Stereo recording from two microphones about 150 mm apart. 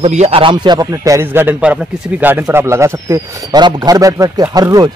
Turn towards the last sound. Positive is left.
turn(degrees=-25)  # may be behind; listen again after turning